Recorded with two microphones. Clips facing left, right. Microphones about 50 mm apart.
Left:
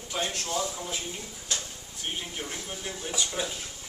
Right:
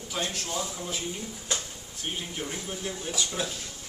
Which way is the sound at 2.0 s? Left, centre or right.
Centre.